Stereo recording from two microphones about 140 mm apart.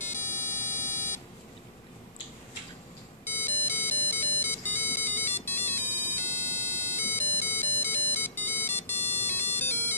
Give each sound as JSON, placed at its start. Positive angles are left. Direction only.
{"t": 0.2, "sound": "buzzer", "side_deg": 15}
{"t": 3.3, "sound": "ringtone", "side_deg": 15}